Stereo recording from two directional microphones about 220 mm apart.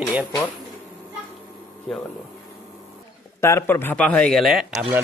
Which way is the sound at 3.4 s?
10° left (ahead or behind).